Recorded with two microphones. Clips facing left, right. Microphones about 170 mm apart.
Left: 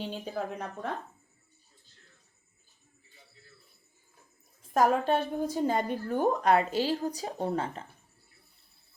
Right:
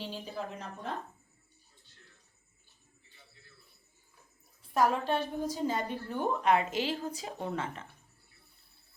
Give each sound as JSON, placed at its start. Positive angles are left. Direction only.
{"t": 0.0, "sound": "speech", "side_deg": 55}
{"t": 4.6, "sound": "a woman's voice", "side_deg": 45}